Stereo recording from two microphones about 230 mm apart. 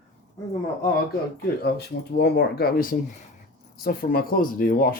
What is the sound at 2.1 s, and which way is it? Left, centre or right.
Speech, left.